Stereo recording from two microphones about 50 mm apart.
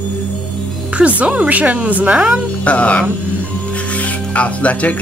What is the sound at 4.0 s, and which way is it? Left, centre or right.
Music, left.